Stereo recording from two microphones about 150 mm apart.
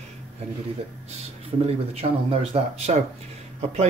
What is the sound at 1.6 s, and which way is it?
Speech, 40° right (ahead or behind).